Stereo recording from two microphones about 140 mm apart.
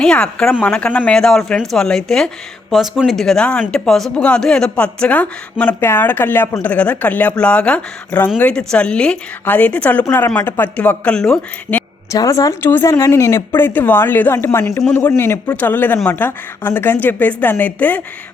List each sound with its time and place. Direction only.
0.0 s speech: 5° left (ahead or behind)
12.1 s a woman's voice: 25° left (ahead or behind)